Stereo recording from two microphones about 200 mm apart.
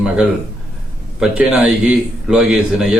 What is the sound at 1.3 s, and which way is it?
A man's voice, 5° right (ahead or behind).